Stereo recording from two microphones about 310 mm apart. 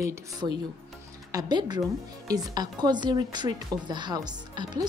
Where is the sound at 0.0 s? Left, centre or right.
Centre.